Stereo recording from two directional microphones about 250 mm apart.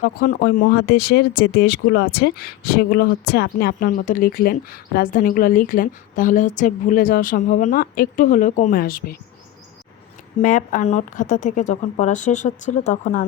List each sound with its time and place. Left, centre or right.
0.0 s speech: left
10.4 s a woman's voice: left